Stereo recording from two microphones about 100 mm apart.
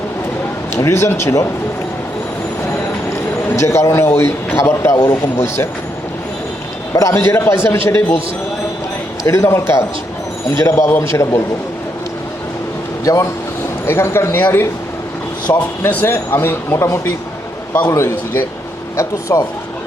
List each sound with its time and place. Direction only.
0.7 s a man's voice: 30° left (ahead or behind)
3.5 s a man's voice: 30° left (ahead or behind)
6.9 s a man's voice: 30° left (ahead or behind)
9.2 s a man's voice: 30° left (ahead or behind)
13.1 s a man's voice: 35° left (ahead or behind)
15.8 s a man's voice: 20° left (ahead or behind)